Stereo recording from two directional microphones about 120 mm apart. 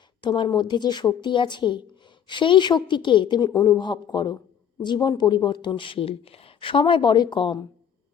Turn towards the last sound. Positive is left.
turn(degrees=40)  # may be behind; listen again after turning